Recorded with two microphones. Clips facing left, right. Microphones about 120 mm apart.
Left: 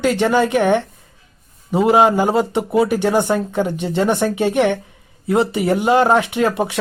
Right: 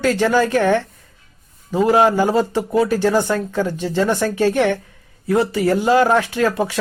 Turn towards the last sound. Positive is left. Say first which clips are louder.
# left 1 dB
turn(degrees=25)  # may be behind; listen again after turning